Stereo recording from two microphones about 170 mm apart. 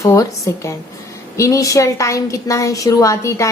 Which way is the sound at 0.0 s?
20° left (ahead or behind).